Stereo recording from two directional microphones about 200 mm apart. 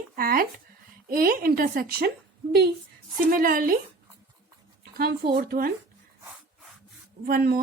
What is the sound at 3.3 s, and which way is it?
Speech, 45° right (ahead or behind).